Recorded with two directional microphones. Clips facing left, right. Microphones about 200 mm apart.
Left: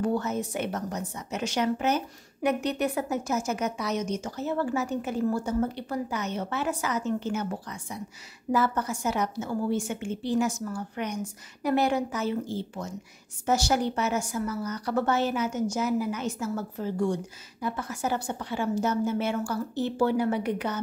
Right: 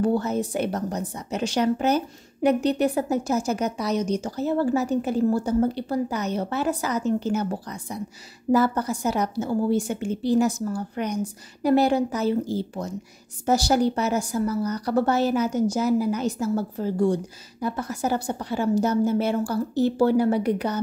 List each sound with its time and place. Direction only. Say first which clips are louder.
0.0 s a woman's voice: right 5 dB; 35° right (ahead or behind)